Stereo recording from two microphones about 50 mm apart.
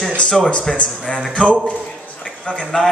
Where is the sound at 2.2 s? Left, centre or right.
Left.